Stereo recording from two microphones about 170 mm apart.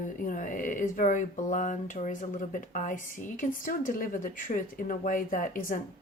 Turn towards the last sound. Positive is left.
turn(degrees=55)  # may be behind; listen again after turning